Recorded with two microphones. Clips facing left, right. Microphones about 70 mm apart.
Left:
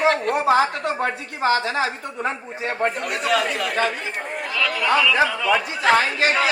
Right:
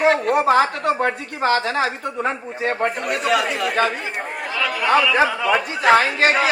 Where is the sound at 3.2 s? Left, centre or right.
Centre.